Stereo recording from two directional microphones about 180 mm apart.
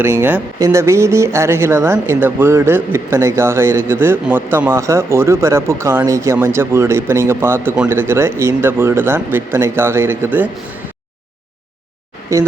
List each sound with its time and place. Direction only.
0.0 s speech: 10° right (ahead or behind)
12.3 s speech: 15° right (ahead or behind)